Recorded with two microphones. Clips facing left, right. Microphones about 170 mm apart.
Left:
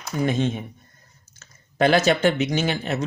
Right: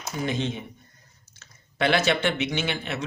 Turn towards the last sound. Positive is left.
turn(degrees=40)  # may be behind; listen again after turning